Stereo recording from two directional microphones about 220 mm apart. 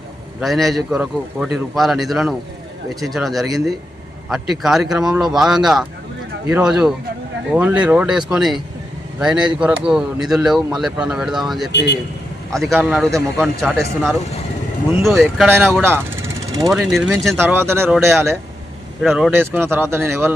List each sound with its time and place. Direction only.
0.3 s speech: centre (ahead or behind)
11.7 s a man's voice: 50° left (ahead or behind)
12.5 s speech: centre (ahead or behind)
15.4 s speech: 10° right (ahead or behind)
16.7 s speech: 5° right (ahead or behind)